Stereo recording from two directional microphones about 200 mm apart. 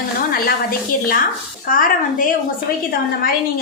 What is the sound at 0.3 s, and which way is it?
A woman's voice, 45° left (ahead or behind).